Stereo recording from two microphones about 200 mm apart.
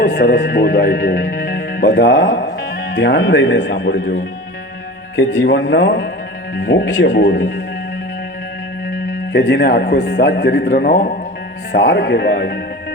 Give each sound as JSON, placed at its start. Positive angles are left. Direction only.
{"t": 0.0, "sound": "a man's voice", "side_deg": 60}
{"t": 9.3, "sound": "a man's voice", "side_deg": 60}
{"t": 10.7, "sound": "a man's voice", "side_deg": 50}
{"t": 11.7, "sound": "a man's voice", "side_deg": 60}